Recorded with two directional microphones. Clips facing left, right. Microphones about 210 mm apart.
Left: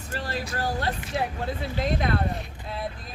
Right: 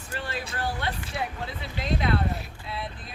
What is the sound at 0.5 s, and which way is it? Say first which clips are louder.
Speech: left 3 dB; 40° left (ahead or behind).